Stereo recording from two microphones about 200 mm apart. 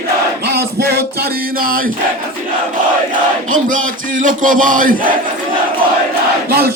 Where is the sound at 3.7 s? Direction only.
40° right (ahead or behind).